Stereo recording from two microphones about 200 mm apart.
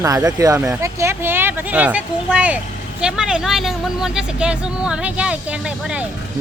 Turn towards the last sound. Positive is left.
turn(degrees=-5)  # may be behind; listen again after turning